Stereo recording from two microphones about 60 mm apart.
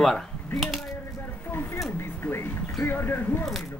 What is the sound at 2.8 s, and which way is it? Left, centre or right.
Speech, left.